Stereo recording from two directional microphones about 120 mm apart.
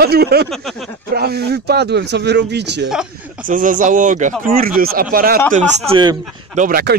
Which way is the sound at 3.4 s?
90° right.